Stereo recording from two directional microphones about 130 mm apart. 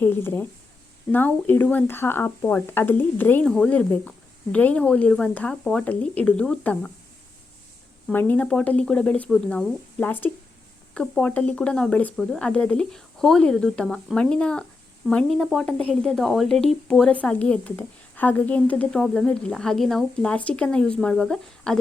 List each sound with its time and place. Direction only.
0.0 s a woman's voice: 15° left (ahead or behind)
8.1 s a woman's voice: 15° left (ahead or behind)